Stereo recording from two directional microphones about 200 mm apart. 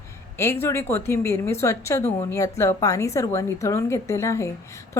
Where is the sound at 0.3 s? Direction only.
10° left (ahead or behind).